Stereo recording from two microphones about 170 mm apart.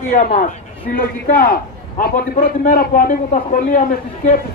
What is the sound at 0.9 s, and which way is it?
A man's voice, 60° left (ahead or behind).